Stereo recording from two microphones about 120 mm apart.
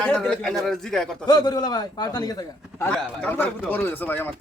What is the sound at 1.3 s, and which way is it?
Speech, 35° left (ahead or behind).